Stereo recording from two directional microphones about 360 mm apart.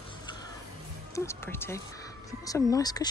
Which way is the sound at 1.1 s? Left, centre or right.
Centre.